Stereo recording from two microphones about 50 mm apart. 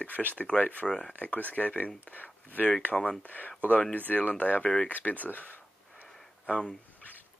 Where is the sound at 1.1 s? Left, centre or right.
Left.